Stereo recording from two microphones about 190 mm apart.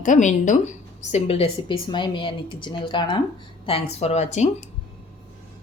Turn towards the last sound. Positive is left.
turn(degrees=35)  # may be behind; listen again after turning